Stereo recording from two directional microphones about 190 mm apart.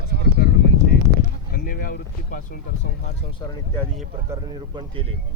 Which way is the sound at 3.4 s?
20° left (ahead or behind).